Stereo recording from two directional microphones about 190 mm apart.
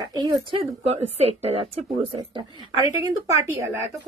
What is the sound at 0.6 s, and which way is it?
Speech, 30° right (ahead or behind).